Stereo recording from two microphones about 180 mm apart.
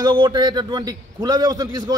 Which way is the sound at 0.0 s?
25° right (ahead or behind).